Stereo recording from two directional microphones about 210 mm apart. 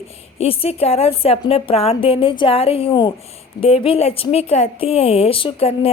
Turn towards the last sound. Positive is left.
turn(degrees=25)  # may be behind; listen again after turning